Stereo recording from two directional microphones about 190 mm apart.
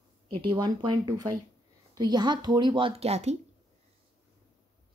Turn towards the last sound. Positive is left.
turn(degrees=-35)  # may be behind; listen again after turning